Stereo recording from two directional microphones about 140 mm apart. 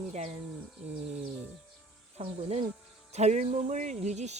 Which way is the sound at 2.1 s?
50° right (ahead or behind).